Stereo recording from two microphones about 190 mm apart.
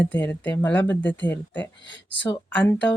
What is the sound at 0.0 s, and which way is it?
Speech, 5° left (ahead or behind).